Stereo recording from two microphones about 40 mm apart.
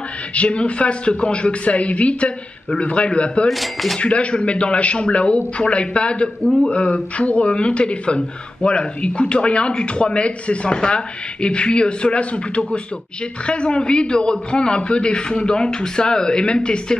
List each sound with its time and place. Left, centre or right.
0.3 s a man's voice: left
3.4 s speech: centre
4.0 s a man's voice: left